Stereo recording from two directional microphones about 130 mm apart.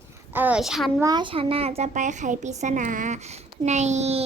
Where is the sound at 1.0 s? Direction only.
35° right (ahead or behind); by 4.2 s 60° right (ahead or behind).